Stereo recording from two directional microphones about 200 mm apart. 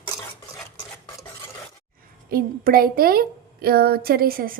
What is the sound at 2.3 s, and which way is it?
A woman's voice, 50° right (ahead or behind).